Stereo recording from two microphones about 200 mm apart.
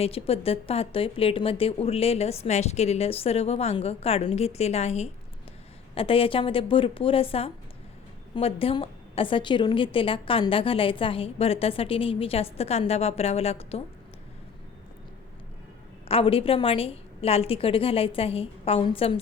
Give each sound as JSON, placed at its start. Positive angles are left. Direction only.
{"t": 0.0, "sound": "a woman's voice", "side_deg": 30}
{"t": 16.0, "sound": "a woman's voice", "side_deg": 30}